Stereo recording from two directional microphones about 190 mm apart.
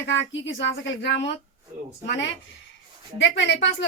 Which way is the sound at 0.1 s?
75° left (ahead or behind).